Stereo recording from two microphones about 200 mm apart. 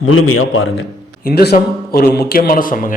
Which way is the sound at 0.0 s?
90° left.